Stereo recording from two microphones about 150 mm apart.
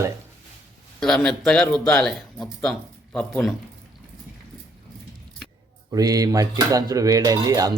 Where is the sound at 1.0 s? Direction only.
5° left (ahead or behind).